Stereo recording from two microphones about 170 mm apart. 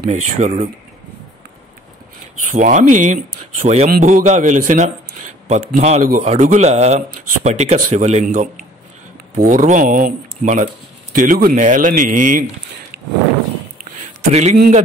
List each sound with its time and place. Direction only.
0.1 s speech: 50° right (ahead or behind)
2.5 s speech: 45° right (ahead or behind)
3.8 s speech: 50° right (ahead or behind)
8.3 s speech: 50° right (ahead or behind)
14.3 s speech: 40° right (ahead or behind)